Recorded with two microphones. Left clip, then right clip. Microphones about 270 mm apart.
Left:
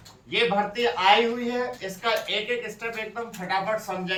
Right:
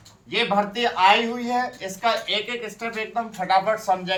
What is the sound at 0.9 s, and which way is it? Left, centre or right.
A man's voice, centre.